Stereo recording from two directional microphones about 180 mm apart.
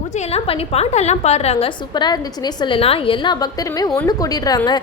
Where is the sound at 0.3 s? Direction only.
35° left (ahead or behind).